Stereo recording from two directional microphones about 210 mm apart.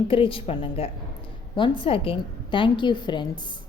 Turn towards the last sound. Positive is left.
turn(degrees=20)  # may be behind; listen again after turning